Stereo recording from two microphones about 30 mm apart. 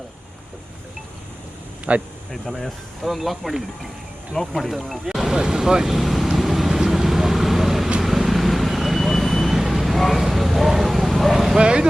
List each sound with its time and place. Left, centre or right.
1.9 s speech: right
2.6 s speech: centre
5.0 s vehicle: centre
5.3 s speech: right; by 6.7 s centre
6.7 s vehicle: centre
11.6 s vehicle: right